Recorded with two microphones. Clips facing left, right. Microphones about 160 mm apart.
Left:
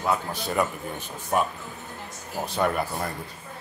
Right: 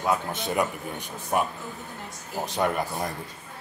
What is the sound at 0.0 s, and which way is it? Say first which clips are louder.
Speech: even; 15° right (ahead or behind).